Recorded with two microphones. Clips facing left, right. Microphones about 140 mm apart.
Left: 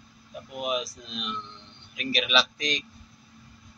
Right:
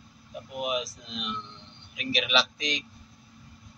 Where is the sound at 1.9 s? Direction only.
10° right (ahead or behind).